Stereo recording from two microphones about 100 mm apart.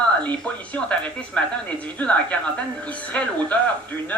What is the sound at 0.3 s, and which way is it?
Speech, 15° left (ahead or behind).